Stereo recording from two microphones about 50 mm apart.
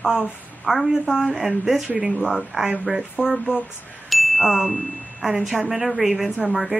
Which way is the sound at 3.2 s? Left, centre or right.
Centre.